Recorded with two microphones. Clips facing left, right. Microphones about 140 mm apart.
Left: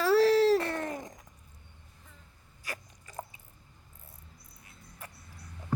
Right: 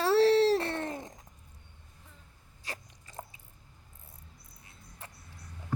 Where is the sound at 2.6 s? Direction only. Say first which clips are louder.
Left 1 dB; 25° right (ahead or behind).